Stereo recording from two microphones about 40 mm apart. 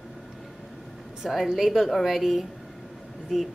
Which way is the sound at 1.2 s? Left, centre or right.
Centre.